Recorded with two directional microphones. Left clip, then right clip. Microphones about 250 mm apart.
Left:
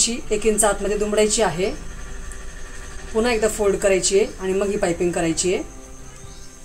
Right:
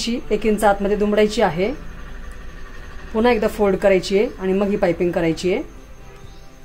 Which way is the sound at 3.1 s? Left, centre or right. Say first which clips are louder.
Right 2 dB; right.